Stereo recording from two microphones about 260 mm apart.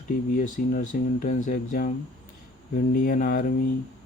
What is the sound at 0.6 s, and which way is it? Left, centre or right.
Speech, left.